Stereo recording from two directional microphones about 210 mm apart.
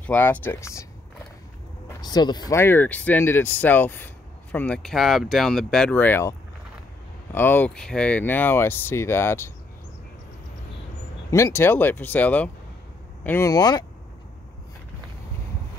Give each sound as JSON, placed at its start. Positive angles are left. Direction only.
{"t": 0.0, "sound": "speech", "side_deg": 10}
{"t": 2.0, "sound": "speech", "side_deg": 20}
{"t": 7.3, "sound": "speech", "side_deg": 10}
{"t": 11.2, "sound": "speech", "side_deg": 15}